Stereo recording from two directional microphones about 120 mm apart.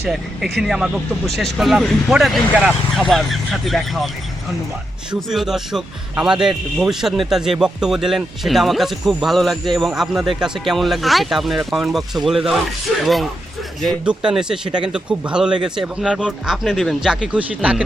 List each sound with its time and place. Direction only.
0.0 s speech: centre (ahead or behind)
5.3 s speech: 5° right (ahead or behind)
14.0 s speech: 10° right (ahead or behind)